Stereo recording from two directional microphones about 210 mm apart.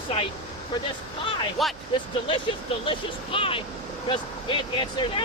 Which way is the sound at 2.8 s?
25° left (ahead or behind).